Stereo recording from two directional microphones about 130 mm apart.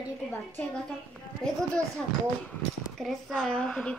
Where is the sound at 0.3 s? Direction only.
15° left (ahead or behind).